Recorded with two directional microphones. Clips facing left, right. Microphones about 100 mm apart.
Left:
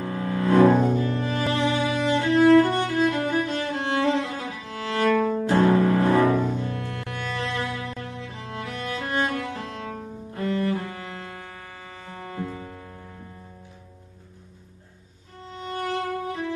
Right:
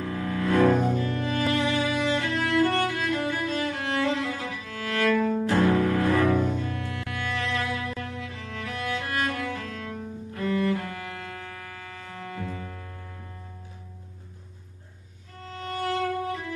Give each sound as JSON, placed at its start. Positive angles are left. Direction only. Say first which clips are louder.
{"t": 0.0, "sound": "cello", "louder": "left 2 dB", "side_deg": 30}
{"t": 2.7, "sound": "music", "louder": "left 3 dB", "side_deg": 25}
{"t": 5.6, "sound": "cello", "louder": "left 4 dB", "side_deg": 30}
{"t": 8.2, "sound": "music", "louder": "left 2 dB", "side_deg": 35}
{"t": 9.8, "sound": "cello", "louder": "left 1 dB", "side_deg": 25}
{"t": 12.0, "sound": "music", "louder": "left 3 dB", "side_deg": 25}
{"t": 15.9, "sound": "music", "louder": "right 2 dB", "side_deg": 25}